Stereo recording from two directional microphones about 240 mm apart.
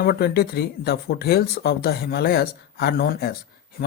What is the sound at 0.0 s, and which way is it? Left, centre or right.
Speech, left.